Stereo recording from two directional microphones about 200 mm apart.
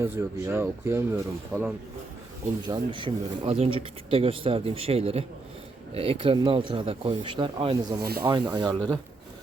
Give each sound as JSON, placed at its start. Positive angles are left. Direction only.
{"t": 0.0, "sound": "speech", "side_deg": -15}
{"t": 2.6, "sound": "speech", "side_deg": -25}
{"t": 7.9, "sound": "speech", "side_deg": -50}
{"t": 8.2, "sound": "speech", "side_deg": -15}